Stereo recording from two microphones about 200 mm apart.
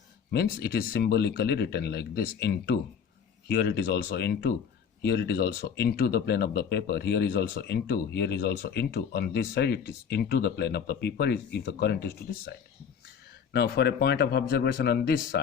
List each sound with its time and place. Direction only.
0.3 s speech: 55° left (ahead or behind)